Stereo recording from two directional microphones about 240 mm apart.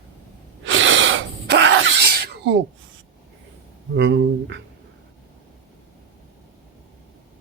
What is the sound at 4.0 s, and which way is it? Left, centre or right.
Speech, right.